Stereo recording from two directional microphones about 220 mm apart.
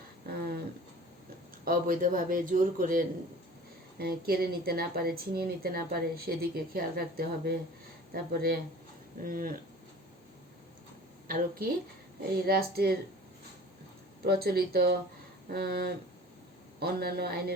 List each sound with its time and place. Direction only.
0.3 s a sound: 45° right (ahead or behind)
1.6 s speech: 40° right (ahead or behind)
11.3 s speech: 40° right (ahead or behind)
14.3 s speech: 45° right (ahead or behind)